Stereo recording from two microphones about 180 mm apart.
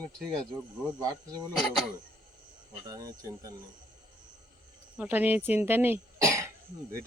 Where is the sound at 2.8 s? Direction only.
20° right (ahead or behind).